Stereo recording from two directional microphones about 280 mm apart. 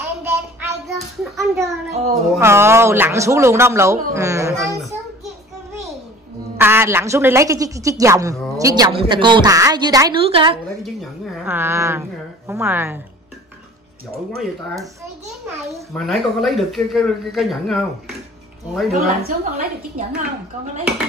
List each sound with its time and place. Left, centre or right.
0.0 s child singing: centre
1.5 s a woman's voice: centre
6.6 s a woman's voice: centre
10.8 s a woman's voice: centre
15.9 s a man's voice: centre
19.0 s a woman's voice: right